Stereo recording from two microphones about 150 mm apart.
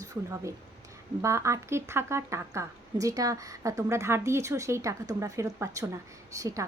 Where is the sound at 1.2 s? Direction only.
20° right (ahead or behind).